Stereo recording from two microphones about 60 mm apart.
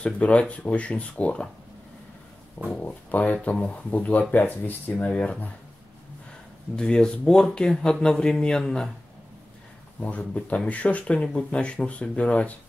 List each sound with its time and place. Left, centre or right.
0.0 s speech: left
2.7 s speech: left
5.0 s speech: centre
6.8 s speech: centre
9.9 s speech: left